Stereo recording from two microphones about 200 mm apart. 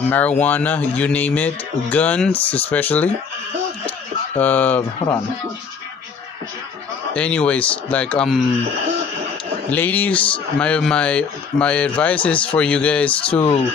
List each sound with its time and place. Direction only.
0.1 s speech: 5° left (ahead or behind)
4.4 s speech: 10° left (ahead or behind)
4.9 s speech: 20° left (ahead or behind)
7.2 s speech: 5° left (ahead or behind)
9.7 s speech: 10° left (ahead or behind)